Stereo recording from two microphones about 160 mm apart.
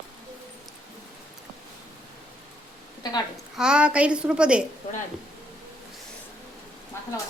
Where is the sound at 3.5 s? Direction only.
5° right (ahead or behind).